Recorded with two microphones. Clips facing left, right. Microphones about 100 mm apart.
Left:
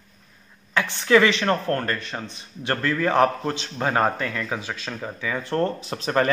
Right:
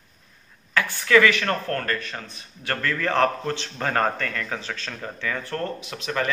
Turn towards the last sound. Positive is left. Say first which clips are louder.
# left 5 dB
turn(degrees=35)  # may be behind; listen again after turning